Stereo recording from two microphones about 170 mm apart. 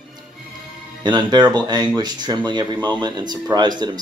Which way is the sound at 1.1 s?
25° right (ahead or behind).